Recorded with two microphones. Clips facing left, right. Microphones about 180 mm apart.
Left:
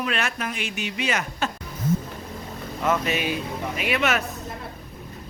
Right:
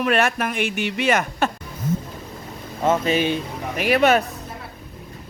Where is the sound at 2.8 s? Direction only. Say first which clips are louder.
Right 5 dB; 30° right (ahead or behind).